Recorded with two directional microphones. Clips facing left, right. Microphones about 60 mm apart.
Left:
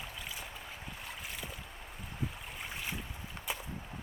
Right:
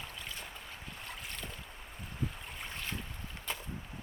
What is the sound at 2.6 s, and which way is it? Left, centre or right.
Boat, centre.